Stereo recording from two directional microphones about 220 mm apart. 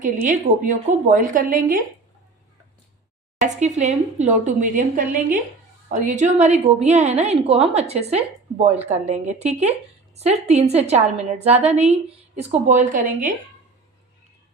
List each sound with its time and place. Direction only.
0.3 s a woman's voice: 35° right (ahead or behind)
3.4 s a woman's voice: 35° right (ahead or behind)